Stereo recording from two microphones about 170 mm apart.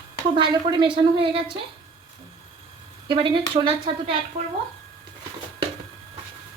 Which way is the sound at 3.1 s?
30° right (ahead or behind).